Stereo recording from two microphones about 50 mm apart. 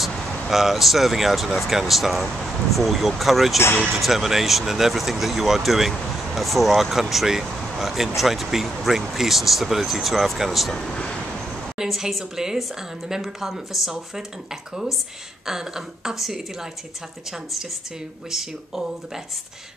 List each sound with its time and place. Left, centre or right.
0.0 s speech: centre
10.7 s speech: centre
11.8 s speech: centre
15.4 s speech: centre
18.3 s speech: centre